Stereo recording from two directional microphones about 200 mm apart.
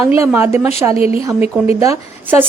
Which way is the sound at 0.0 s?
15° right (ahead or behind).